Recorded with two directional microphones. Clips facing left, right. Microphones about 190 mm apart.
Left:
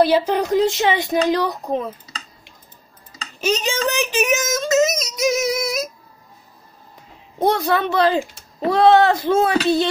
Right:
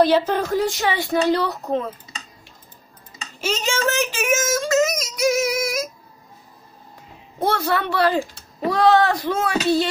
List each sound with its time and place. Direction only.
0.0 s speech: 10° left (ahead or behind)
3.3 s child singing: 15° left (ahead or behind)
7.3 s speech: 15° left (ahead or behind)